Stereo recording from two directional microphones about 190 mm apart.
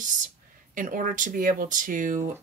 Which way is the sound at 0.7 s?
45° right (ahead or behind).